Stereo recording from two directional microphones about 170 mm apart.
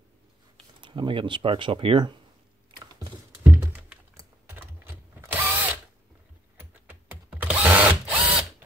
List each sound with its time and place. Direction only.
0.7 s speech: 30° right (ahead or behind)
2.7 s a sound: 20° right (ahead or behind)
3.4 s computer keyboard: 10° right (ahead or behind)
6.9 s drill: 10° right (ahead or behind)